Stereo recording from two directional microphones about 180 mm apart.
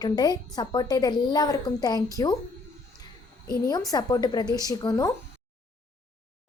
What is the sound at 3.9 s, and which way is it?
A woman's voice, 20° left (ahead or behind).